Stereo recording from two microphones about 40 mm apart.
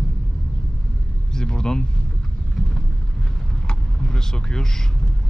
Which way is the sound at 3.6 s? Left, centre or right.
Left.